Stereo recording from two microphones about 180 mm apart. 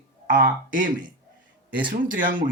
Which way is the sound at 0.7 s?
50° right (ahead or behind).